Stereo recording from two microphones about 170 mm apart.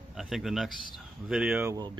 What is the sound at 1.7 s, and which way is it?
Speech, 25° right (ahead or behind).